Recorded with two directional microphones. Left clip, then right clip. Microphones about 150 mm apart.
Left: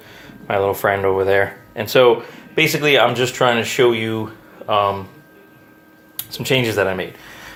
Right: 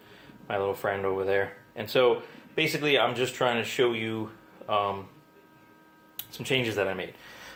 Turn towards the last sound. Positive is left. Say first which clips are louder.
# left 8 dB
turn(degrees=0)  # may be behind; listen again after turning